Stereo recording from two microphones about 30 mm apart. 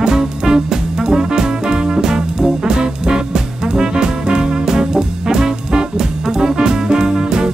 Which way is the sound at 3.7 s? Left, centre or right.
Right.